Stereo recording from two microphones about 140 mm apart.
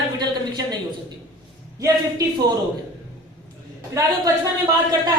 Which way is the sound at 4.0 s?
20° right (ahead or behind).